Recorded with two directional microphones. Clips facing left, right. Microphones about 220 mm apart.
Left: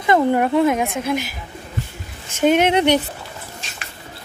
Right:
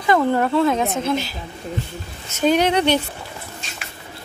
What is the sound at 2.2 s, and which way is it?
Speech, 25° left (ahead or behind).